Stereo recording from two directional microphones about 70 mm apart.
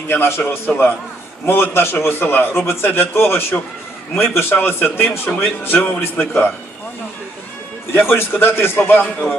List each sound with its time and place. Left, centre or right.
0.1 s a man's voice: left
0.7 s a man's voice: centre
1.5 s a man's voice: left
7.9 s a man's voice: left
8.8 s speech: left